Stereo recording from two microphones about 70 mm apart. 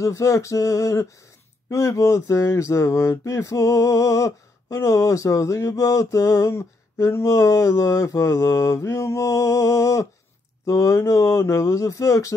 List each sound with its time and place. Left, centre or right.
0.0 s speech: left
6.5 s speech: left